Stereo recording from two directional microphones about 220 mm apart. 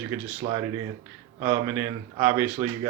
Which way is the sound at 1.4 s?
15° right (ahead or behind).